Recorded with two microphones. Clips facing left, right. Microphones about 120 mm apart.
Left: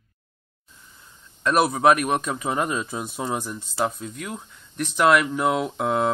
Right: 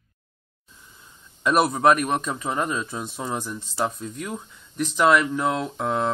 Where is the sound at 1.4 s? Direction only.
Centre (ahead or behind).